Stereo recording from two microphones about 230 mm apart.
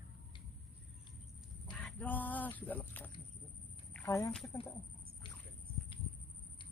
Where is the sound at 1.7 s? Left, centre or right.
Centre.